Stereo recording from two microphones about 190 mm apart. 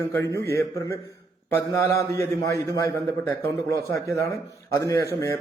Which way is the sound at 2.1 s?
15° left (ahead or behind).